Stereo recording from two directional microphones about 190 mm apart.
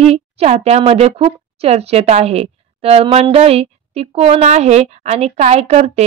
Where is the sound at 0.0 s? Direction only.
35° right (ahead or behind).